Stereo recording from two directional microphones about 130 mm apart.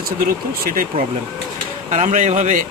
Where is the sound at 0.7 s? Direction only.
90° right.